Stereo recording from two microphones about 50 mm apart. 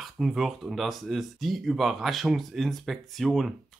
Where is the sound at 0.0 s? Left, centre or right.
Centre.